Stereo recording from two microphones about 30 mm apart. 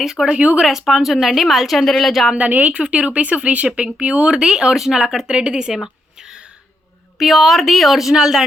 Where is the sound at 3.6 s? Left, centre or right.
Right.